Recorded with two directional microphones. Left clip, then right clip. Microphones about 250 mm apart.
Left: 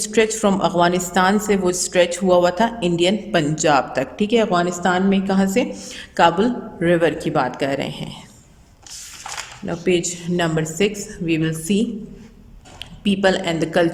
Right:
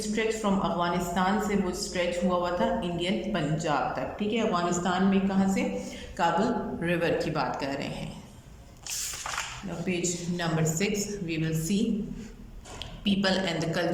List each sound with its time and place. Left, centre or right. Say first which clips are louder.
0.0 s a woman's voice: left 11 dB; left
9.6 s a woman's voice: left 15 dB; left
13.1 s speech: left 9 dB; left